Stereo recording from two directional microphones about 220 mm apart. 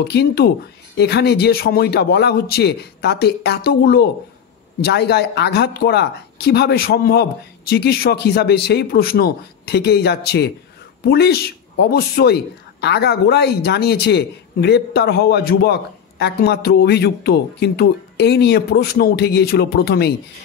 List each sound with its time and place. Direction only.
0.1 s a woman's voice: 45° left (ahead or behind)